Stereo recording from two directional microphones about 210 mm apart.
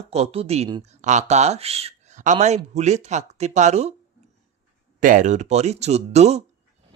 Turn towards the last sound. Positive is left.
turn(degrees=-30)  # may be behind; listen again after turning